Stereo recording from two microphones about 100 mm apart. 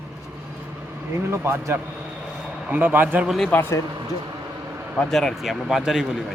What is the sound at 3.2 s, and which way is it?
Speech, centre (ahead or behind).